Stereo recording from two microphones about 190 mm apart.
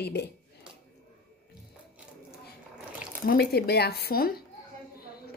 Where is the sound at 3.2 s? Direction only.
55° left (ahead or behind).